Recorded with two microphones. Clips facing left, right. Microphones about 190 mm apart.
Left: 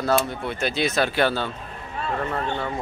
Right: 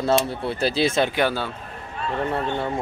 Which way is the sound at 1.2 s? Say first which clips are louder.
Even; 10° right (ahead or behind).